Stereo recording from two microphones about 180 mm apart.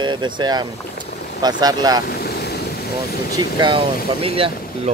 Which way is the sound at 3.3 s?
25° right (ahead or behind).